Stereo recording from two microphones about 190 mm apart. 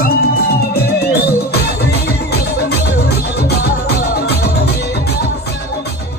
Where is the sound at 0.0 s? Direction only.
55° left (ahead or behind).